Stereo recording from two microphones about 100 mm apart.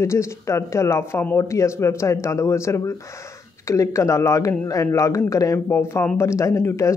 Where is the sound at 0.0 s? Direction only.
30° left (ahead or behind).